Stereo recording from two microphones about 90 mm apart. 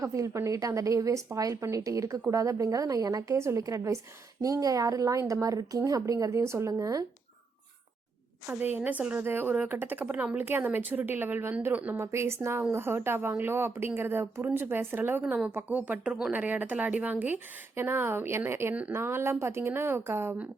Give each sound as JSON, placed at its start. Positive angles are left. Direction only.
{"t": 0.0, "sound": "speech", "side_deg": -35}
{"t": 8.4, "sound": "speech", "side_deg": -20}
{"t": 11.9, "sound": "speech", "side_deg": -30}
{"t": 18.7, "sound": "speech", "side_deg": -15}
{"t": 18.9, "sound": "speech", "side_deg": -25}